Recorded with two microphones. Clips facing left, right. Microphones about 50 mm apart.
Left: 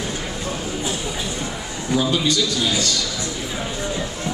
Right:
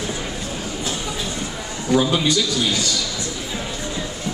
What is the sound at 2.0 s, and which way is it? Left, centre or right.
Music, centre.